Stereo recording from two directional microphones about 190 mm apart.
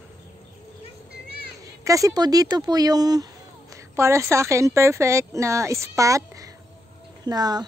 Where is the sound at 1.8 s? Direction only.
15° right (ahead or behind).